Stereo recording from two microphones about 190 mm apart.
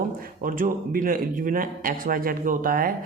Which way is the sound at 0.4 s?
45° right (ahead or behind).